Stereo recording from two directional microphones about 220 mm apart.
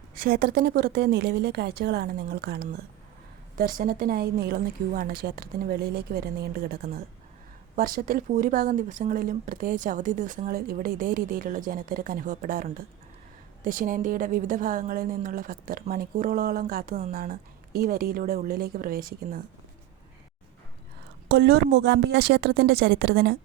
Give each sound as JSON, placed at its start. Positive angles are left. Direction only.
{"t": 0.1, "sound": "a woman's voice", "side_deg": -40}
{"t": 21.2, "sound": "speech", "side_deg": -50}